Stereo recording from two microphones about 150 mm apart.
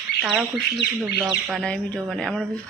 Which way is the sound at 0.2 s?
Centre (ahead or behind).